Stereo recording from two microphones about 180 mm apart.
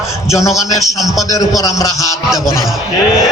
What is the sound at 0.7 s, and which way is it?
A man's voice, 20° left (ahead or behind).